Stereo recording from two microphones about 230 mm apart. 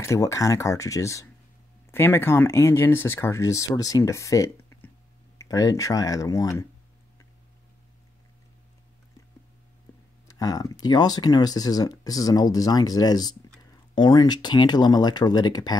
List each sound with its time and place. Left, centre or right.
0.0 s speech: centre
5.5 s speech: centre
10.2 s speech: centre